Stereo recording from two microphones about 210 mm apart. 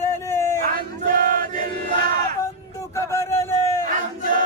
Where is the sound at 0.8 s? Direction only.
45° right (ahead or behind).